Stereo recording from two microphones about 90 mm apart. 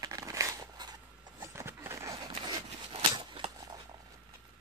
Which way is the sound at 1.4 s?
30° right (ahead or behind).